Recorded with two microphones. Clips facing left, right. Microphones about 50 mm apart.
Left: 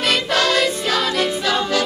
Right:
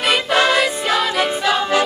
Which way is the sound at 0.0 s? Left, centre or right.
Centre.